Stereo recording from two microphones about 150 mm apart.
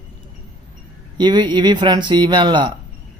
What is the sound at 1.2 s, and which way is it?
A man's voice, 30° right (ahead or behind).